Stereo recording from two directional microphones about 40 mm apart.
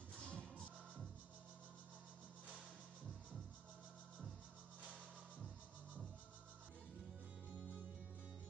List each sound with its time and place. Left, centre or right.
0.1 s music: left
7.5 s music: right